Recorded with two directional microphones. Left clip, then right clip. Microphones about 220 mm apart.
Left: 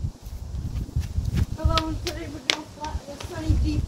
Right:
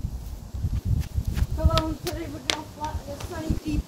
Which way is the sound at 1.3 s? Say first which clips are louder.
Even; 45° right (ahead or behind).